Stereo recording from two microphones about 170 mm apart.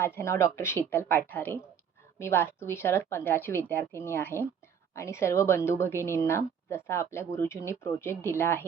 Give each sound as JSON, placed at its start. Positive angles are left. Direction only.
{"t": 0.0, "sound": "a woman's voice", "side_deg": 15}